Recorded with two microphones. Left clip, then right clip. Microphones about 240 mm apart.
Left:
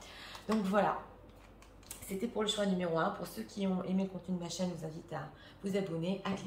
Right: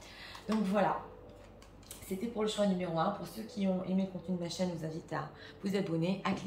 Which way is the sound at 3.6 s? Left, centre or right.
Centre.